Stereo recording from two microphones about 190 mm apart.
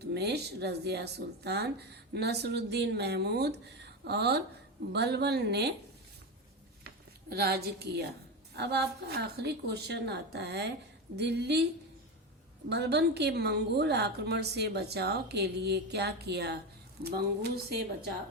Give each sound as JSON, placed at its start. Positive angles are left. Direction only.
{"t": 0.0, "sound": "speech", "side_deg": -60}
{"t": 7.3, "sound": "speech", "side_deg": -55}
{"t": 12.6, "sound": "speech", "side_deg": -60}